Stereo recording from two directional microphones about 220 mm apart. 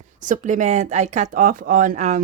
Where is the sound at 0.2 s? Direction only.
35° right (ahead or behind).